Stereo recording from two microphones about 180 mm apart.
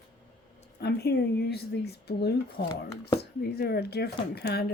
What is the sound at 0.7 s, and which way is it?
Speech, 65° left (ahead or behind).